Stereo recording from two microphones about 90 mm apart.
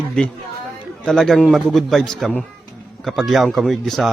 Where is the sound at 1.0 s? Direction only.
5° left (ahead or behind).